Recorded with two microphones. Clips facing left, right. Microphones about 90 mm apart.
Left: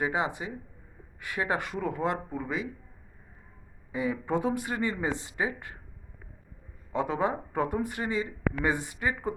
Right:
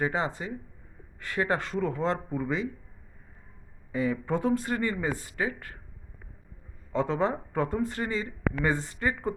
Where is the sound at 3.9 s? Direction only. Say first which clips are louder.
Right 1 dB; 15° left (ahead or behind).